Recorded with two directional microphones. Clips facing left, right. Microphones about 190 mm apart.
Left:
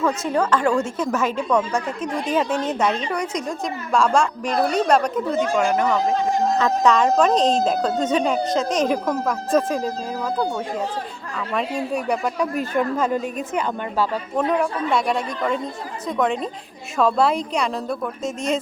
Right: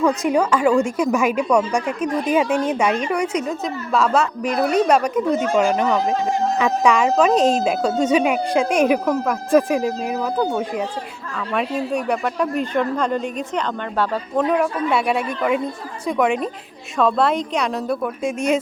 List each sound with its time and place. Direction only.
0.0 s speech: 15° right (ahead or behind)
5.5 s speech: 20° right (ahead or behind)
11.5 s a man's voice: centre (ahead or behind)